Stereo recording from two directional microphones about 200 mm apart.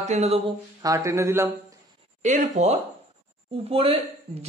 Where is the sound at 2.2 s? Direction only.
35° right (ahead or behind).